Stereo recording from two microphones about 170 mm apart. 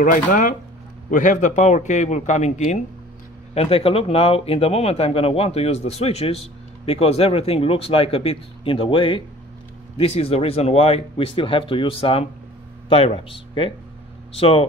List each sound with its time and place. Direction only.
0.0 s a man's voice: 50° left (ahead or behind); by 14.7 s 35° left (ahead or behind)